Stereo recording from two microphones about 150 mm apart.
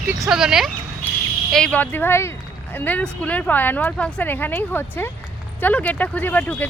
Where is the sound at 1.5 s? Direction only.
5° left (ahead or behind).